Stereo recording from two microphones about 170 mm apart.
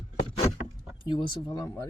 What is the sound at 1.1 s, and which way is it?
Speech, 30° left (ahead or behind).